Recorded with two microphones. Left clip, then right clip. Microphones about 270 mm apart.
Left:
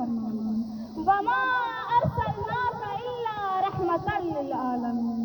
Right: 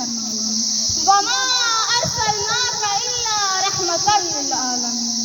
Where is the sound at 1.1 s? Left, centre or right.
Right.